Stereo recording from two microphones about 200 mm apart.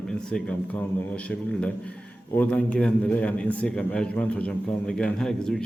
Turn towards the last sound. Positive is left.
turn(degrees=5)  # may be behind; listen again after turning